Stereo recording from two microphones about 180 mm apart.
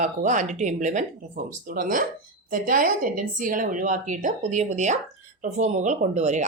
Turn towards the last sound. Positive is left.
turn(degrees=-40)  # may be behind; listen again after turning